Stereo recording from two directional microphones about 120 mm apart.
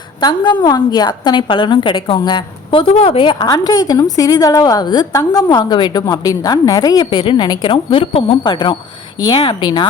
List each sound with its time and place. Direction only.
0.2 s a woman's voice: 40° left (ahead or behind)